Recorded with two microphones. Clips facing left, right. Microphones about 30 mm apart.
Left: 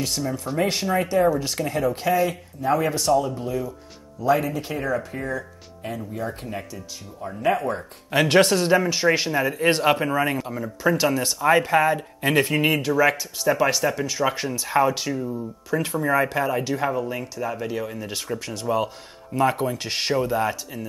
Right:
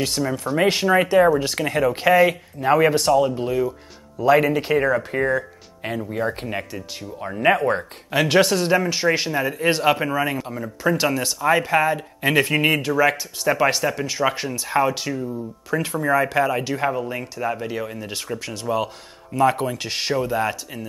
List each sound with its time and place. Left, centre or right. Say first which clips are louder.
0.2 s speech: right 4 dB; right
0.6 s speech: right 5 dB; right
1.6 s speech: right 4 dB; right
2.2 s speech: right 4 dB; right
8.1 s speech: even; centre
19.9 s speech: even; centre
20.3 s speech: right 1 dB; centre